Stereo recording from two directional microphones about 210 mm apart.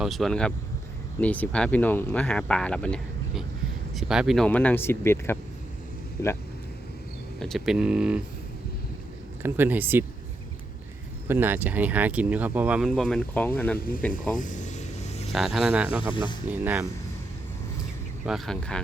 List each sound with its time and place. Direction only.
0.0 s speech: centre (ahead or behind)
7.3 s speech: centre (ahead or behind)
9.4 s speech: 10° right (ahead or behind)
11.3 s speech: 10° right (ahead or behind); by 14.2 s 5° left (ahead or behind)
14.3 s vehicle: 35° left (ahead or behind)
15.3 s speech: centre (ahead or behind)
16.1 s speech: 20° left (ahead or behind)
16.5 s speech: 10° right (ahead or behind)
18.3 s speech: centre (ahead or behind)